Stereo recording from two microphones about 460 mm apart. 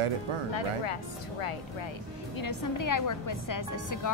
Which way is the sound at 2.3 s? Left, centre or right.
Left.